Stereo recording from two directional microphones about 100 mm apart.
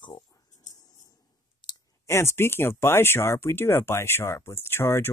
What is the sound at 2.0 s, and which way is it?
Speech, 25° left (ahead or behind).